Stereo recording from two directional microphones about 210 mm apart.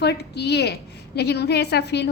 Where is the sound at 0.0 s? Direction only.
50° left (ahead or behind).